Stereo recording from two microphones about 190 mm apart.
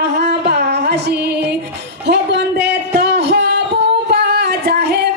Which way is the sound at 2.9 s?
60° right (ahead or behind).